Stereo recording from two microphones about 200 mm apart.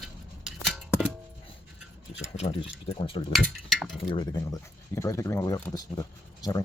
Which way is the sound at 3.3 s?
Centre (ahead or behind).